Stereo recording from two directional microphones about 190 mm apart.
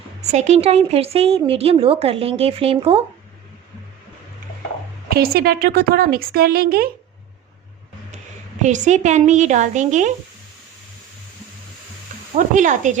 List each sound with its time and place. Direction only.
0.2 s speech: 35° right (ahead or behind)
5.1 s speech: 55° right (ahead or behind)
8.6 s speech: 40° right (ahead or behind)
12.5 s speech: 40° right (ahead or behind)